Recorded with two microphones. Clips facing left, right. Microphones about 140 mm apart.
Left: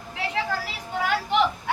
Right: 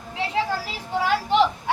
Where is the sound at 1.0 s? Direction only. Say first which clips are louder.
Right 3 dB; 30° right (ahead or behind).